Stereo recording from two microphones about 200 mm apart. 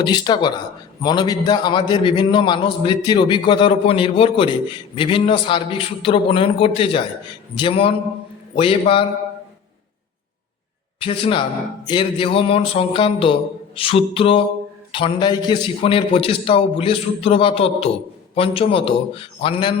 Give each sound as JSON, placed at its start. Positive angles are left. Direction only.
{"t": 0.0, "sound": "a man's voice", "side_deg": 20}
{"t": 11.0, "sound": "a man's voice", "side_deg": 25}